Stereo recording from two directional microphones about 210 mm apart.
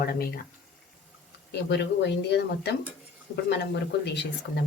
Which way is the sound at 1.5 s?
55° left (ahead or behind).